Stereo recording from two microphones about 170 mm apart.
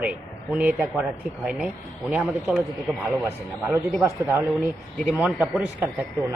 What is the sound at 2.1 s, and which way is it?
Speech, 5° right (ahead or behind).